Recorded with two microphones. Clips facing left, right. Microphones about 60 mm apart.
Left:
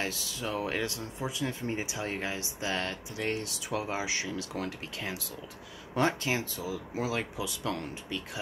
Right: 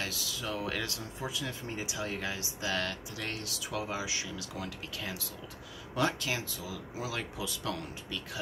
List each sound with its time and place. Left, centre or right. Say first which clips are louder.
0.0 s speech: left 3 dB; left